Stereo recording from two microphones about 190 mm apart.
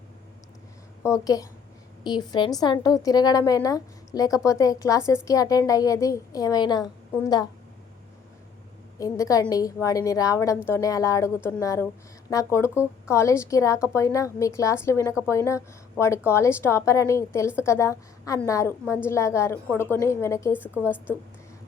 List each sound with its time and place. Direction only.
1.1 s a woman's voice: 20° left (ahead or behind)
9.0 s a woman's voice: 15° left (ahead or behind)